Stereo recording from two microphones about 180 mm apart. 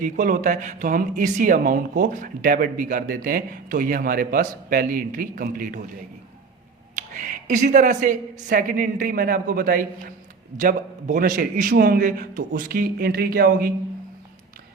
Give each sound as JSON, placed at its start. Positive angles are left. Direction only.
{"t": 0.0, "sound": "speech", "side_deg": -45}
{"t": 6.9, "sound": "speech", "side_deg": -45}